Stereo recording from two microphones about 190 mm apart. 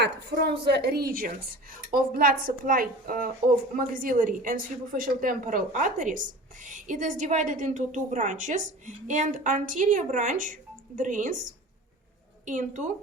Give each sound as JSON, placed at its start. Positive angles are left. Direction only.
{"t": 0.0, "sound": "a woman's voice", "side_deg": -60}
{"t": 12.5, "sound": "a woman's voice", "side_deg": -40}